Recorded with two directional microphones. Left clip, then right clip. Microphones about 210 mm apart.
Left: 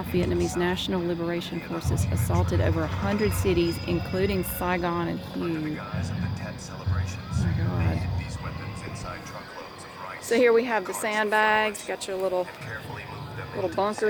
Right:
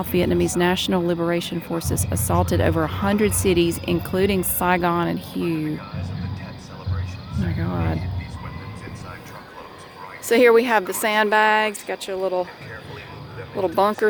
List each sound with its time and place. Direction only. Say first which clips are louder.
0.0 s speech: right 6 dB; 30° right (ahead or behind)
7.6 s speech: right 6 dB; 20° right (ahead or behind)
10.2 s speech: right 6 dB; 40° right (ahead or behind)
13.6 s speech: right 7 dB; 45° right (ahead or behind)